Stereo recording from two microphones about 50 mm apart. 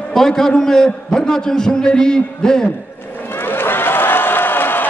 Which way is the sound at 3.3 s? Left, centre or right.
Left.